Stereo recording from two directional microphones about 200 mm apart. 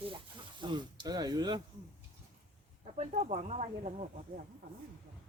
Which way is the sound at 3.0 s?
35° right (ahead or behind).